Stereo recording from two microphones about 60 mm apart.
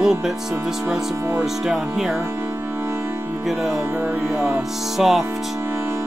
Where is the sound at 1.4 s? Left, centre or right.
Centre.